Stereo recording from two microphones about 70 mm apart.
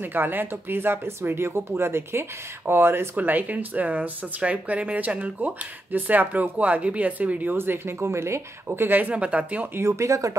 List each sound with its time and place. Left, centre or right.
0.0 s speech: right
3.2 s speech: right
7.5 s speech: right
9.8 s speech: right